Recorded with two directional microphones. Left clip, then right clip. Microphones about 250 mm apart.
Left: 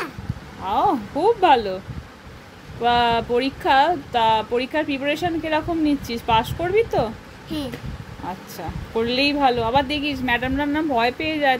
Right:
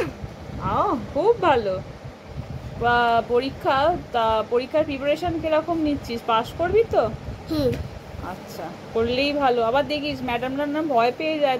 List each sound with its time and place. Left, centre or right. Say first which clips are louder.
0.7 s speech: left 3 dB; left
2.8 s speech: left 1 dB; left
8.9 s speech: left 1 dB; left